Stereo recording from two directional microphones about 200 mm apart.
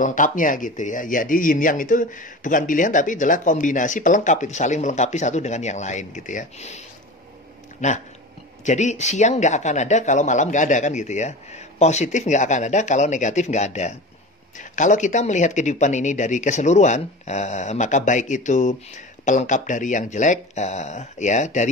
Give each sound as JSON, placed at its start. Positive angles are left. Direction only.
{"t": 0.0, "sound": "speech", "side_deg": 40}
{"t": 7.8, "sound": "speech", "side_deg": 35}